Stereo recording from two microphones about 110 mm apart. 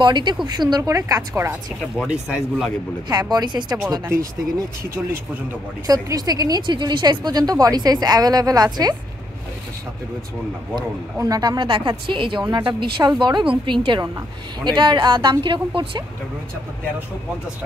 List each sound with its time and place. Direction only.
0.0 s speech: 40° right (ahead or behind)
2.0 s speech: centre (ahead or behind)
3.1 s speech: 40° right (ahead or behind)
4.0 s speech: 25° right (ahead or behind)
11.1 s speech: 35° right (ahead or behind); by 16.0 s 50° right (ahead or behind)